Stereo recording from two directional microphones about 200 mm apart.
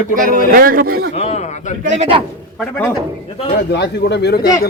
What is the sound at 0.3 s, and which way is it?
Speech, 45° right (ahead or behind).